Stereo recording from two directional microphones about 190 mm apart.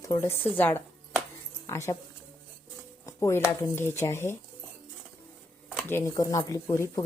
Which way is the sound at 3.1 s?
15° left (ahead or behind).